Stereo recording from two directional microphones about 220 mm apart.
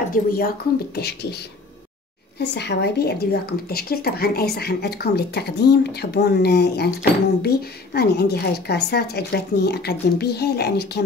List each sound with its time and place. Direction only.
0.1 s a woman's voice: 40° left (ahead or behind)
2.3 s a woman's voice: 50° left (ahead or behind)